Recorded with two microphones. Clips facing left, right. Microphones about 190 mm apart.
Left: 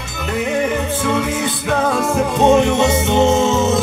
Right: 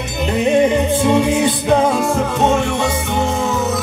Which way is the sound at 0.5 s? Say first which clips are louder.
Right 7 dB; 20° right (ahead or behind).